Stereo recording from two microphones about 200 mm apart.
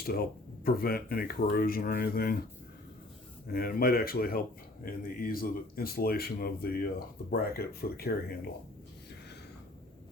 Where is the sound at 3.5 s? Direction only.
50° left (ahead or behind).